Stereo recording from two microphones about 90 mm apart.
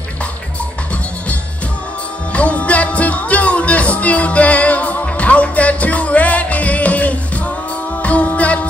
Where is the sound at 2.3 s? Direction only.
15° left (ahead or behind).